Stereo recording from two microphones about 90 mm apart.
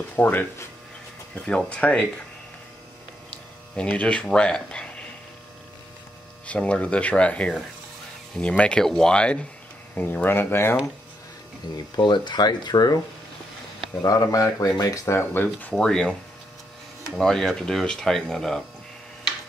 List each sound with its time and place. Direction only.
0.1 s speech: 20° left (ahead or behind)
1.3 s speech: 10° left (ahead or behind)
3.7 s speech: 10° left (ahead or behind)
6.4 s speech: 15° left (ahead or behind)
9.9 s speech: 20° left (ahead or behind)
11.7 s speech: 55° left (ahead or behind)
14.0 s speech: 40° left (ahead or behind); by 15.8 s 20° left (ahead or behind)
15.8 s speech: 10° left (ahead or behind)